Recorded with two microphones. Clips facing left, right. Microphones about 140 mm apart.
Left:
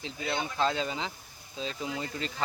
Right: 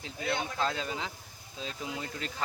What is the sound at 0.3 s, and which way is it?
Speech, centre (ahead or behind).